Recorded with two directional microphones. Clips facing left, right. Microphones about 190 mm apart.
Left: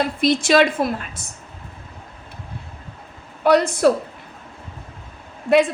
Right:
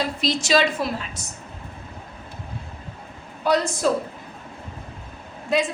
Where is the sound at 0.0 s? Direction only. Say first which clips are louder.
Left 6 dB; 55° left (ahead or behind).